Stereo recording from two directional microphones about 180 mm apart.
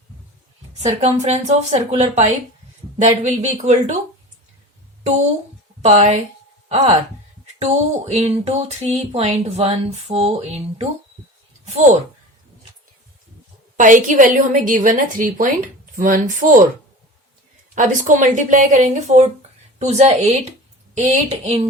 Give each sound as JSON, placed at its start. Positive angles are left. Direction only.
{"t": 0.8, "sound": "speech", "side_deg": -40}
{"t": 5.8, "sound": "speech", "side_deg": -40}
{"t": 13.7, "sound": "a woman's voice", "side_deg": -45}
{"t": 17.7, "sound": "a woman's voice", "side_deg": -45}